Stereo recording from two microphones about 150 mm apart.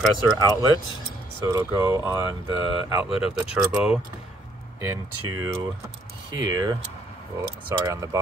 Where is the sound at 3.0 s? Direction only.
10° right (ahead or behind).